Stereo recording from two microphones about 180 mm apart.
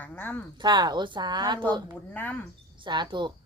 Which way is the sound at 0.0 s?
10° left (ahead or behind).